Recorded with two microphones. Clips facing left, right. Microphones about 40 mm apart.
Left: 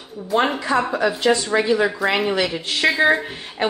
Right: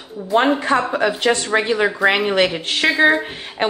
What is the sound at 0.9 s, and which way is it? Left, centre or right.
A woman's voice, right.